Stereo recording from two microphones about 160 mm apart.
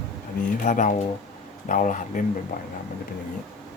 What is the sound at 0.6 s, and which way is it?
Speech, 50° left (ahead or behind).